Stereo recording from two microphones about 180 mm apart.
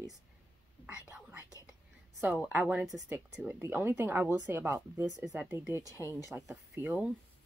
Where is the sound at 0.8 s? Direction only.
5° right (ahead or behind).